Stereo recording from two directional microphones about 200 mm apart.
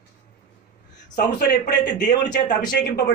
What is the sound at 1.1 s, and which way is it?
Speech, 55° left (ahead or behind).